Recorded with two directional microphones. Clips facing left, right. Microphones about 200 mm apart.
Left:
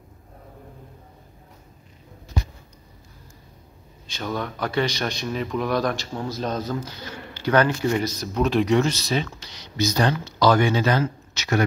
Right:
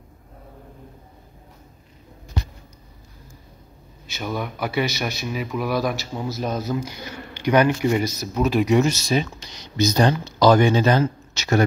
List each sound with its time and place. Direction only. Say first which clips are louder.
4.1 s a man's voice: right 1 dB; 10° right (ahead or behind)